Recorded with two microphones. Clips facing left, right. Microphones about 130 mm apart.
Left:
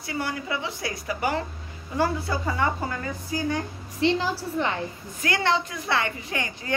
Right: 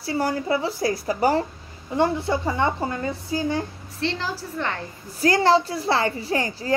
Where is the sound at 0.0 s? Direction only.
35° right (ahead or behind).